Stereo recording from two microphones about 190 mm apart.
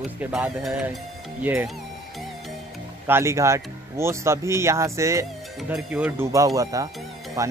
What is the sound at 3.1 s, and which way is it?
Speech, 15° right (ahead or behind).